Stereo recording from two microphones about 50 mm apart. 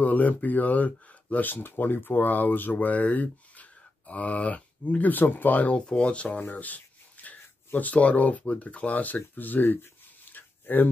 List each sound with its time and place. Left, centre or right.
0.0 s speech: left
5.8 s speech: left
6.4 s speech: left
10.3 s a sound: left